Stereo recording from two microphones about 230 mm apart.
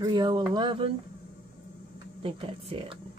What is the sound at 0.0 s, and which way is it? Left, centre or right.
Speech, centre.